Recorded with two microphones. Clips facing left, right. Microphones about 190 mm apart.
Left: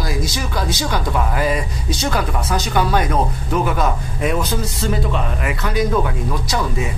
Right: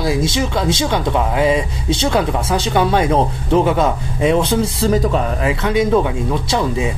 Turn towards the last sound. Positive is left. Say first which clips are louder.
# right 4 dB
turn(degrees=-25)  # may be behind; listen again after turning